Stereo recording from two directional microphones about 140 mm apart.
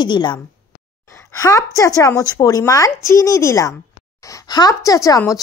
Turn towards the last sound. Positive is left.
turn(degrees=25)  # may be behind; listen again after turning